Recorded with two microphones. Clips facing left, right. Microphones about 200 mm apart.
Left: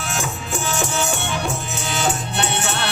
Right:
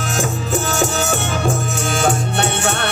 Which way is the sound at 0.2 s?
40° right (ahead or behind).